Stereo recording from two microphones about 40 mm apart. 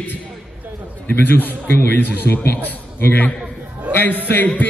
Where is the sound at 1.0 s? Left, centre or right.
Left.